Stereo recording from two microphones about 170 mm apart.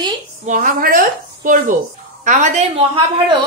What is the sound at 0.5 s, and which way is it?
A woman's voice, 55° right (ahead or behind).